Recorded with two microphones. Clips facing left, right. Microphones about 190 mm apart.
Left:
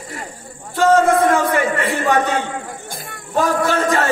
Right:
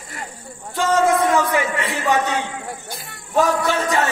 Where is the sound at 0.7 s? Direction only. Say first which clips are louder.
Left 4 dB; 55° left (ahead or behind).